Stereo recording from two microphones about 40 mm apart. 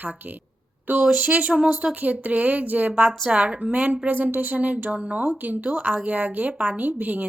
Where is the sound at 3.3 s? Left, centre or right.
Right.